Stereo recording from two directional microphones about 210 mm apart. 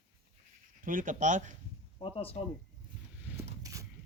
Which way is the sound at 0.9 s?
40° right (ahead or behind).